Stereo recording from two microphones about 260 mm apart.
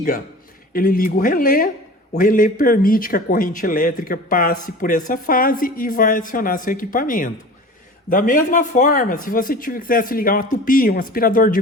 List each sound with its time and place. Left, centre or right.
0.7 s a man's voice: left